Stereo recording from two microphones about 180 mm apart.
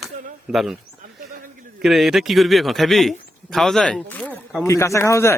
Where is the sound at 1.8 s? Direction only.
Centre (ahead or behind).